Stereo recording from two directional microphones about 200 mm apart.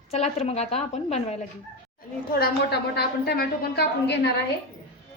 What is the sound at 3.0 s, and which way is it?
A woman's voice, 50° left (ahead or behind).